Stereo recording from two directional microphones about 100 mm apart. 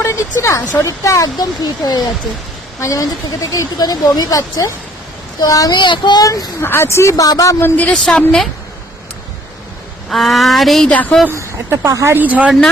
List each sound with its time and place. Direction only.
0.0 s a woman's voice: 30° left (ahead or behind); by 6.2 s 50° left (ahead or behind)
6.2 s speech: 35° left (ahead or behind)
7.6 s speech: 15° left (ahead or behind)
10.1 s speech: centre (ahead or behind)
10.8 s speech: 15° left (ahead or behind)
11.3 s speech: 25° right (ahead or behind)
12.1 s speech: 15° right (ahead or behind)